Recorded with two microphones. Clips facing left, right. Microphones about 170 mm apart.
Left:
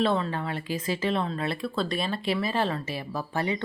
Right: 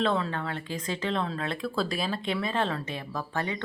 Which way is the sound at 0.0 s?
5° left (ahead or behind).